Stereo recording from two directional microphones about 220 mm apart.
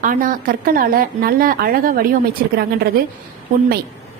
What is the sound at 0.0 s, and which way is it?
A woman's voice, 40° right (ahead or behind).